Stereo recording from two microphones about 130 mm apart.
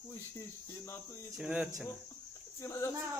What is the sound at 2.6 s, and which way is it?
Speech, 25° left (ahead or behind).